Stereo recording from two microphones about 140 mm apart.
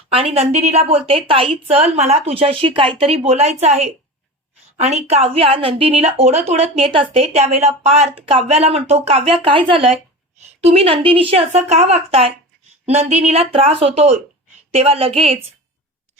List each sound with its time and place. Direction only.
0.1 s a woman's voice: 45° right (ahead or behind)